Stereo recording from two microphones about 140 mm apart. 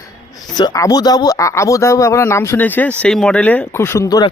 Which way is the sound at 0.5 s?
25° left (ahead or behind).